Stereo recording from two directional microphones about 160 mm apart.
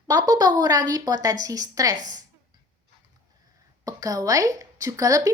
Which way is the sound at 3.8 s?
20° right (ahead or behind).